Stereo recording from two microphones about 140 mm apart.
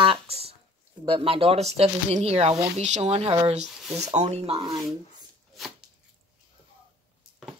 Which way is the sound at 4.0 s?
55° right (ahead or behind).